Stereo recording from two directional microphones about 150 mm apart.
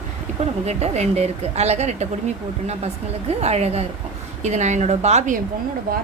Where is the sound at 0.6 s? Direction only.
45° right (ahead or behind).